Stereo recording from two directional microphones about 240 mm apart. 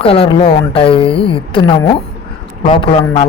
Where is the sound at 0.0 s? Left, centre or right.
Left.